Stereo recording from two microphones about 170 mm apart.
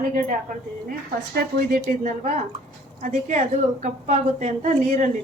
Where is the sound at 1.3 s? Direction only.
50° right (ahead or behind).